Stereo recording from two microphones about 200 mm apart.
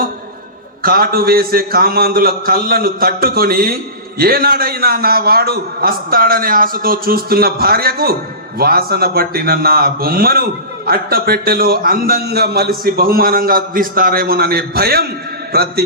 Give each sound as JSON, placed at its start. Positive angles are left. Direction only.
{"t": 0.8, "sound": "a man's voice", "side_deg": -45}